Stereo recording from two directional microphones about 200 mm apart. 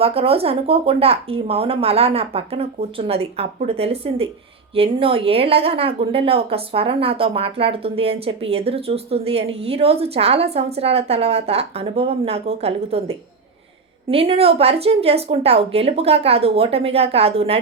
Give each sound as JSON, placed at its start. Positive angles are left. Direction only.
{"t": 0.0, "sound": "a woman's voice", "side_deg": -30}
{"t": 14.1, "sound": "a woman's voice", "side_deg": -30}